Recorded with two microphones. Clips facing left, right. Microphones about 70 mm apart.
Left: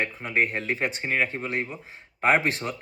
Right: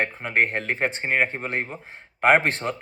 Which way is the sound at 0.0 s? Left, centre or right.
Right.